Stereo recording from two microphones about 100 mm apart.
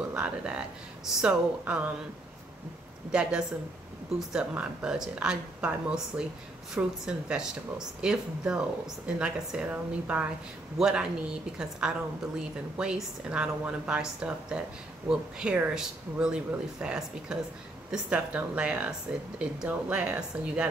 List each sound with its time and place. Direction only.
0.0 s speech: 10° right (ahead or behind)
3.1 s speech: 10° right (ahead or behind)